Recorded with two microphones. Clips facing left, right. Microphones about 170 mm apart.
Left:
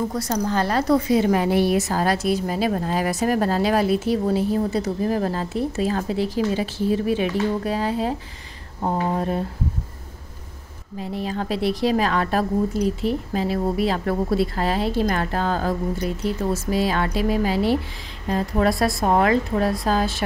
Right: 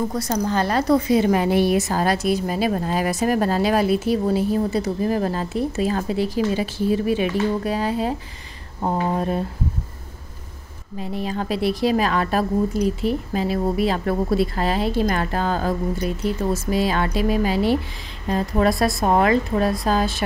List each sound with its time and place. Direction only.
0.1 s a woman's voice: 20° right (ahead or behind)
11.0 s a woman's voice: 15° right (ahead or behind)